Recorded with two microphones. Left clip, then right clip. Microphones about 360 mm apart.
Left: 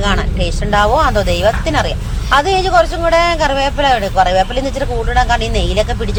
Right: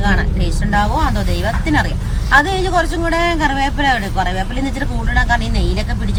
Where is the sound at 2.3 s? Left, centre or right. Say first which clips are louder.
Left 2 dB; centre.